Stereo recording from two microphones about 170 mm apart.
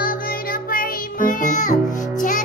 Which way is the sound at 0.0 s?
55° left (ahead or behind).